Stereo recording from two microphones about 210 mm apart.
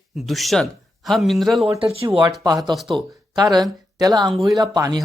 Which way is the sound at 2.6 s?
Centre (ahead or behind).